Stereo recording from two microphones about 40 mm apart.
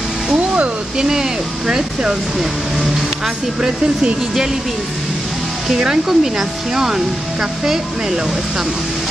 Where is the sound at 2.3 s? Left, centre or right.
Centre.